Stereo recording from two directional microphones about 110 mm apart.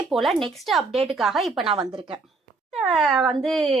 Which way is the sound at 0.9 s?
65° right (ahead or behind).